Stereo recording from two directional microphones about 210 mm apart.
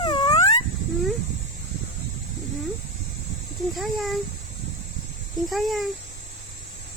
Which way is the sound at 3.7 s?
Centre (ahead or behind).